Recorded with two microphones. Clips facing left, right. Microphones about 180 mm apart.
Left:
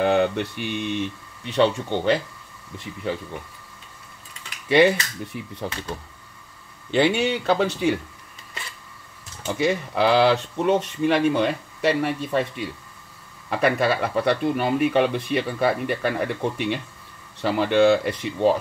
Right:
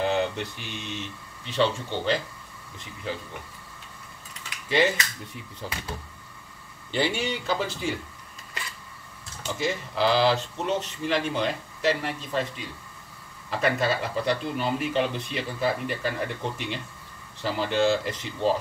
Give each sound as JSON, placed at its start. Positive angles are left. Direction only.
{"t": 0.0, "sound": "speech", "side_deg": 60}
{"t": 4.6, "sound": "speech", "side_deg": 65}
{"t": 7.0, "sound": "speech", "side_deg": 70}
{"t": 9.6, "sound": "speech", "side_deg": 65}
{"t": 13.5, "sound": "speech", "side_deg": 65}